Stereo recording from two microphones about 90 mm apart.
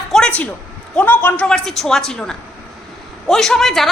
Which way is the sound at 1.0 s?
15° left (ahead or behind).